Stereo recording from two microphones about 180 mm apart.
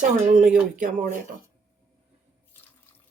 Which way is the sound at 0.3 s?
45° right (ahead or behind).